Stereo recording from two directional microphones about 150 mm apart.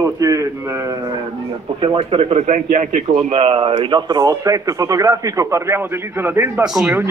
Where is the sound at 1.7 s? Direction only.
35° right (ahead or behind); by 3.0 s 55° right (ahead or behind).